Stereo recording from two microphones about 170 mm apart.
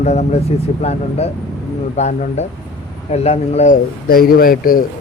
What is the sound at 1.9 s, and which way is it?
Speech, 40° left (ahead or behind).